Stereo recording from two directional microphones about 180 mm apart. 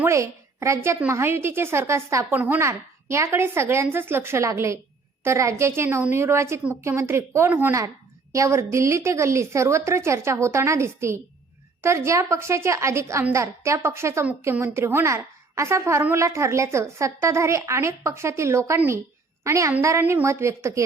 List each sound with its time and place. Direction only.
0.0 s a woman's voice: 15° right (ahead or behind)